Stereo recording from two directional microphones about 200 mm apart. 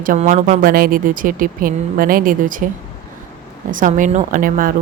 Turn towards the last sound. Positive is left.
turn(degrees=-45)  # may be behind; listen again after turning